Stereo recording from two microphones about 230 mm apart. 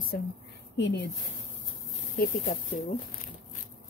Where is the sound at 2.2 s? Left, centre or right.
Left.